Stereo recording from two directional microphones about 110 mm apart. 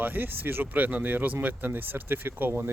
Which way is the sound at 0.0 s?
15° right (ahead or behind).